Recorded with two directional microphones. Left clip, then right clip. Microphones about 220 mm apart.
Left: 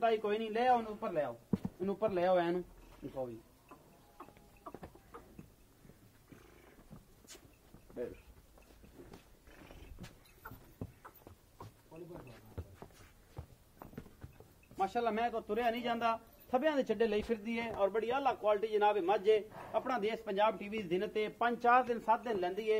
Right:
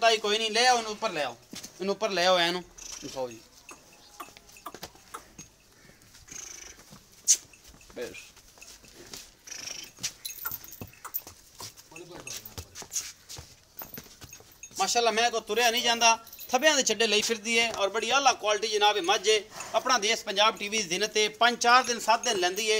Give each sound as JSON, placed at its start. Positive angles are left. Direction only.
{"t": 0.0, "sound": "a man's voice", "side_deg": -35}
{"t": 1.8, "sound": "a man's voice", "side_deg": -50}
{"t": 14.8, "sound": "a man's voice", "side_deg": -35}